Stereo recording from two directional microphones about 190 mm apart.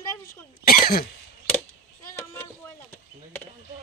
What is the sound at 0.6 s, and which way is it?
Cough, 50° left (ahead or behind).